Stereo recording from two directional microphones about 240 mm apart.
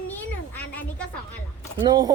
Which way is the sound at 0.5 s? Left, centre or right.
Centre.